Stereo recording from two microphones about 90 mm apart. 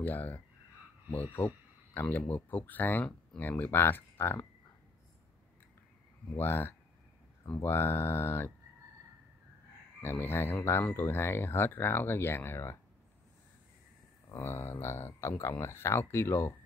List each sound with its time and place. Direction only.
0.0 s speech: 20° left (ahead or behind)
6.3 s speech: 25° left (ahead or behind)
10.0 s speech: 25° left (ahead or behind)
14.3 s speech: 25° left (ahead or behind)